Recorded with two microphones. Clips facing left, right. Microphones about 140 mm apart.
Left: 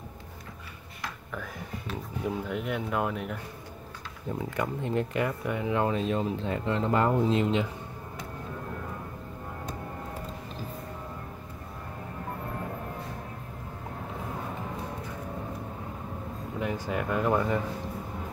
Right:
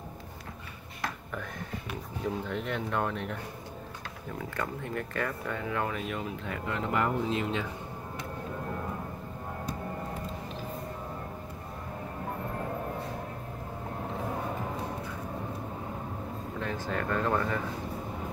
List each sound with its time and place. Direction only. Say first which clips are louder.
2.2 s speech: left 1 dB; 5° left (ahead or behind)
4.4 s speech: left 4 dB; 20° left (ahead or behind)
16.5 s speech: left 3 dB; 15° left (ahead or behind)